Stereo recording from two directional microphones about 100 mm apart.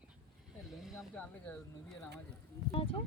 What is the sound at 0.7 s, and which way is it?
Vehicle, 5° right (ahead or behind).